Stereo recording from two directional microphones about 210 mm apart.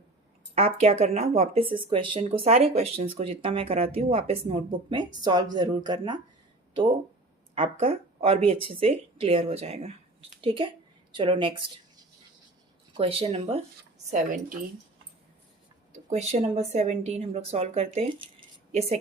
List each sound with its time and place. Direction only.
0.5 s speech: 30° right (ahead or behind)
7.5 s speech: 25° right (ahead or behind)
12.9 s speech: 25° right (ahead or behind)
16.0 s speech: 30° right (ahead or behind)